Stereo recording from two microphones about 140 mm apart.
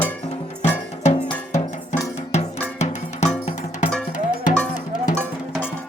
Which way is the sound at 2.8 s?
55° left (ahead or behind).